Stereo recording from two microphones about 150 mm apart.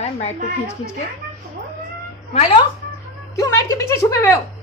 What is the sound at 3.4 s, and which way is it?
A woman's voice, 20° left (ahead or behind).